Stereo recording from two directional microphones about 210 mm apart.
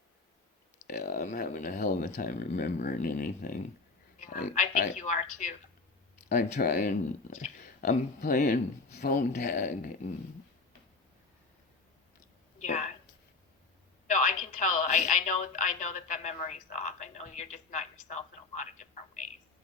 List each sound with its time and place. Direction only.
1.0 s a woman's voice: 35° left (ahead or behind)
12.6 s a sound: 35° left (ahead or behind)
14.1 s a woman's voice: 35° left (ahead or behind)